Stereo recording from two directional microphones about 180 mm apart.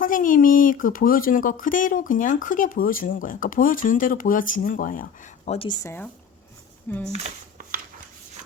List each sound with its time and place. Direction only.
0.0 s speech: 50° left (ahead or behind)
5.5 s speech: 25° left (ahead or behind)
7.1 s speech: 35° right (ahead or behind)